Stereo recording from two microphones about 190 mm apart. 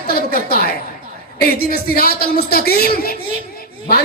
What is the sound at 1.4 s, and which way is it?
A man's voice, 55° left (ahead or behind).